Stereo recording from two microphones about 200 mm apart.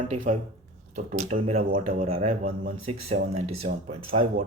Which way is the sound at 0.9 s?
35° right (ahead or behind).